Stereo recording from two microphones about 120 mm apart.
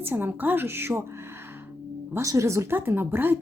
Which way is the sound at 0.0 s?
15° right (ahead or behind).